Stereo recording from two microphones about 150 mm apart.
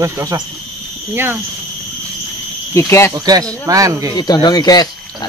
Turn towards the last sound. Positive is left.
turn(degrees=25)  # may be behind; listen again after turning